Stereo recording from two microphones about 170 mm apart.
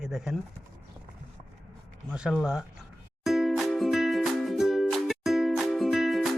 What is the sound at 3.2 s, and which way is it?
Music, centre (ahead or behind).